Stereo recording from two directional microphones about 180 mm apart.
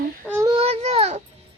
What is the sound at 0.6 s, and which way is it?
Speech, 35° right (ahead or behind).